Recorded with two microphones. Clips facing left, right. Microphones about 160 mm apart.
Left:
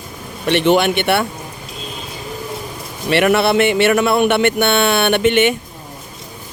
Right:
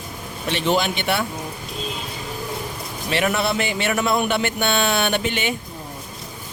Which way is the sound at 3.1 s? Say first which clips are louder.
Left 8 dB; 70° left (ahead or behind).